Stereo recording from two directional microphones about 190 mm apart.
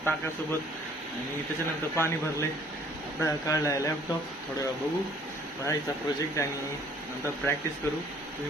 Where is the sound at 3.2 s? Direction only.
15° left (ahead or behind).